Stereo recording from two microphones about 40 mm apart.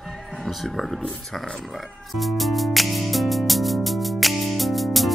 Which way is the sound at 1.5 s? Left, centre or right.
Centre.